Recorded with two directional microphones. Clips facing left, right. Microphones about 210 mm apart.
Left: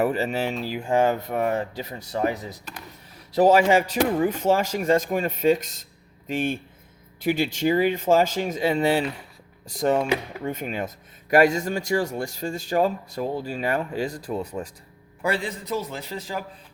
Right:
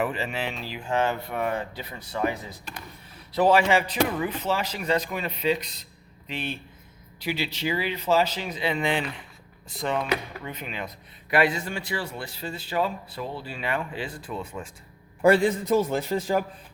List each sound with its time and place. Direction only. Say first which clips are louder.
0.0 s speech: left 5 dB; 40° left (ahead or behind)
15.2 s a man's voice: right 8 dB; 50° right (ahead or behind)